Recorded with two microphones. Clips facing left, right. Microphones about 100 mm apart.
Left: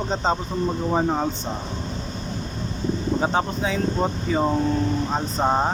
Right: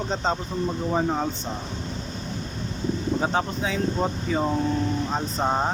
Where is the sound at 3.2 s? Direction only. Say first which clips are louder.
Left 3 dB; 5° left (ahead or behind).